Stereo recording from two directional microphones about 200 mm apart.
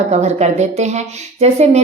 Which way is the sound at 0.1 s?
35° right (ahead or behind).